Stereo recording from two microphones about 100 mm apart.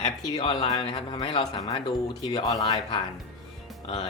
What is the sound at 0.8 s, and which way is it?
Speech, 55° left (ahead or behind).